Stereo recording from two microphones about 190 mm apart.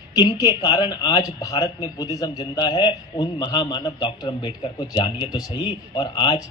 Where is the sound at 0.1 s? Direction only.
20° left (ahead or behind).